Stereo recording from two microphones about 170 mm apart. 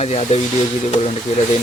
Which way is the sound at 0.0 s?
40° left (ahead or behind).